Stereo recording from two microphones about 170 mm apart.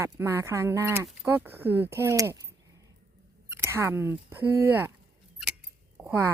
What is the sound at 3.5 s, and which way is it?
Speech, 15° right (ahead or behind).